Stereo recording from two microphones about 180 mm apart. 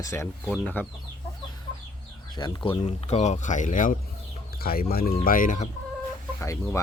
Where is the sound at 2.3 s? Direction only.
25° left (ahead or behind); by 3.9 s 45° left (ahead or behind).